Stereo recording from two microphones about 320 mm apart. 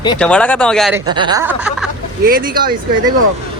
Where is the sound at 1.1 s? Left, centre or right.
Centre.